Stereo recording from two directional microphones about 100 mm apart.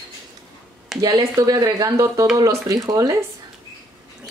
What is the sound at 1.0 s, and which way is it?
Speech, 35° right (ahead or behind).